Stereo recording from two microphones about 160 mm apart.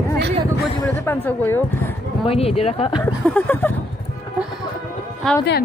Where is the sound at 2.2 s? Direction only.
40° left (ahead or behind).